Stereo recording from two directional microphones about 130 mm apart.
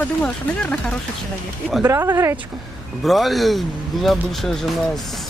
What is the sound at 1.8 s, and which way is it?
Speech, 20° right (ahead or behind).